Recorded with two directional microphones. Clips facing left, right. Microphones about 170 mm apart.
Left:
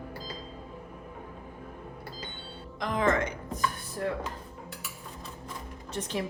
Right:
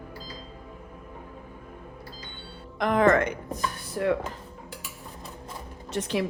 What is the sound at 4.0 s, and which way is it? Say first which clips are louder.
Dishes: right 6 dB; 90° right.